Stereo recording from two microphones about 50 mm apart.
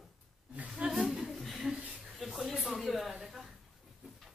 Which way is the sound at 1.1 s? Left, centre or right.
Centre.